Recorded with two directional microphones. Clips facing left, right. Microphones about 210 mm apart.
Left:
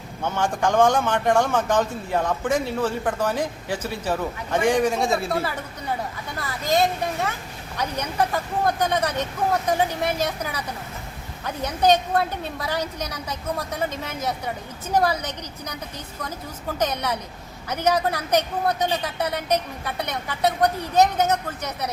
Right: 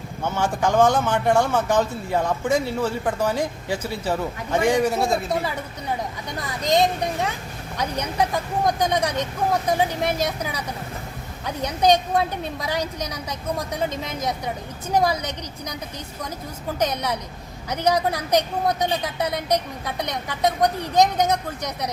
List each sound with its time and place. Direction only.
0.2 s a man's voice: 10° right (ahead or behind)
6.4 s a man's voice: 15° right (ahead or behind)